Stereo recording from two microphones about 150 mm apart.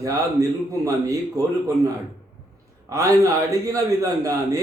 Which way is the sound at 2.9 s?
20° right (ahead or behind).